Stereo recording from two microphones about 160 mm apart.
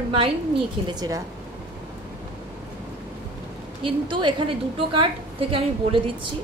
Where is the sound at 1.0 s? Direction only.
20° right (ahead or behind).